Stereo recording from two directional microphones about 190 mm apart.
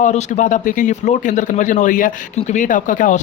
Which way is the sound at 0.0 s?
40° left (ahead or behind).